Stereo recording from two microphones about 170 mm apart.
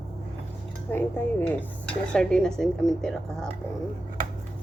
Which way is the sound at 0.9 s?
10° left (ahead or behind).